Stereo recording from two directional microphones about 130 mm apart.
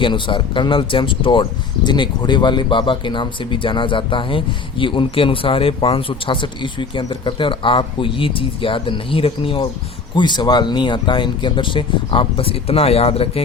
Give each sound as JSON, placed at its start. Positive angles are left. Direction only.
{"t": 0.0, "sound": "speech", "side_deg": 40}
{"t": 10.2, "sound": "speech", "side_deg": 35}